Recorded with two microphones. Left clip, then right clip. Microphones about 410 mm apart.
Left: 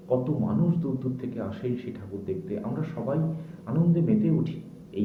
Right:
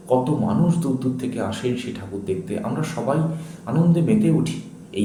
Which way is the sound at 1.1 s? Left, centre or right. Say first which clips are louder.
Right 8 dB; left.